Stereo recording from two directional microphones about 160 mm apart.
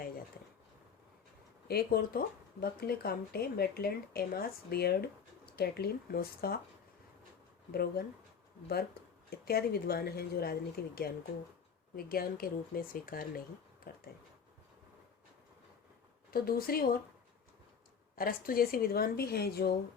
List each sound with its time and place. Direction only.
1.6 s speech: 75° left (ahead or behind)
7.7 s speech: 75° left (ahead or behind)
9.5 s speech: 75° left (ahead or behind)
16.3 s speech: 65° left (ahead or behind)
18.2 s speech: 65° left (ahead or behind)